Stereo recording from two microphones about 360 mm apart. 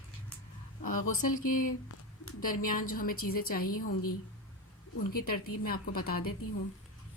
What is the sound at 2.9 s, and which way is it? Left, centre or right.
Speech, left.